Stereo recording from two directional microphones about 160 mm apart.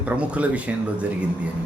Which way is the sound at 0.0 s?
10° right (ahead or behind).